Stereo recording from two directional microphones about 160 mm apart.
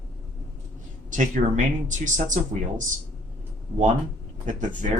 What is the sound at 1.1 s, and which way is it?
Speech, 55° right (ahead or behind).